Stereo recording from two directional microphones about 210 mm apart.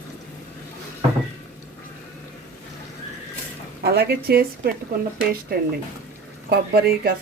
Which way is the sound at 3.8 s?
50° right (ahead or behind).